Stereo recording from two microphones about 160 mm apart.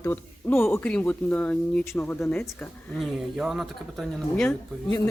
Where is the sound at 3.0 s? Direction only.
Centre (ahead or behind).